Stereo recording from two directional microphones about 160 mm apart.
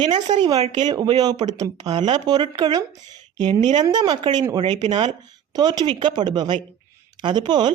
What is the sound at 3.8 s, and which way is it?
Speech, 25° right (ahead or behind).